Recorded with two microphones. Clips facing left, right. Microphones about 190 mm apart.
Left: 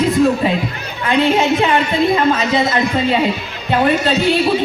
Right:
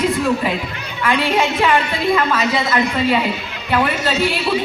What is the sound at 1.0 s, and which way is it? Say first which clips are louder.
Speech: left 3 dB; 25° left (ahead or behind).